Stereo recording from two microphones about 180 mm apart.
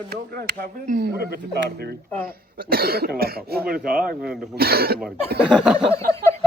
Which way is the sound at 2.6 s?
60° right (ahead or behind).